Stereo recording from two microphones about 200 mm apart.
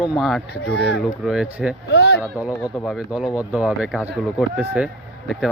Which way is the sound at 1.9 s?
55° left (ahead or behind).